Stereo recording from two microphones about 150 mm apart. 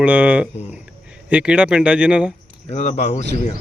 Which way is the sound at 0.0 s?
10° right (ahead or behind).